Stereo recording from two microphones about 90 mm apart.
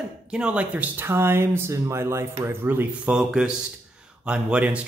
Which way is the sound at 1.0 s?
25° right (ahead or behind).